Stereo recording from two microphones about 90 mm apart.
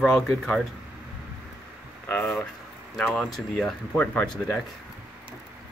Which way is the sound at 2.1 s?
15° left (ahead or behind).